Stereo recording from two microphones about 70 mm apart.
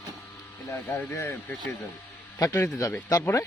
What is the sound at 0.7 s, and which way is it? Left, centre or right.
Speech, left.